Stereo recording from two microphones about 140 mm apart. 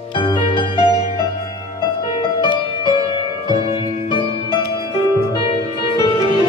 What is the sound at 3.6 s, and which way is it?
Music, 45° left (ahead or behind).